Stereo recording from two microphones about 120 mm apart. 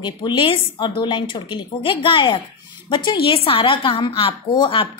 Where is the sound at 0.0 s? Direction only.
40° left (ahead or behind).